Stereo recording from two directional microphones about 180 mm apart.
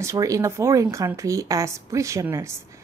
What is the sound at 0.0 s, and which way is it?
A woman's voice, 15° right (ahead or behind).